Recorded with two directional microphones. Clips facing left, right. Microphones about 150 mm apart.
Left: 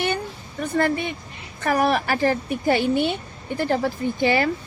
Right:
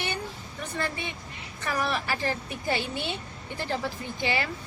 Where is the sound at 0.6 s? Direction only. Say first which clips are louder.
Left 11 dB; 55° left (ahead or behind).